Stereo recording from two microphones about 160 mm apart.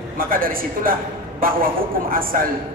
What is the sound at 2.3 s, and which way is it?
Speech, 60° right (ahead or behind).